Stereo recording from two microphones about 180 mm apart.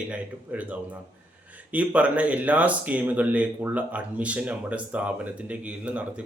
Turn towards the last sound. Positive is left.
turn(degrees=-5)  # may be behind; listen again after turning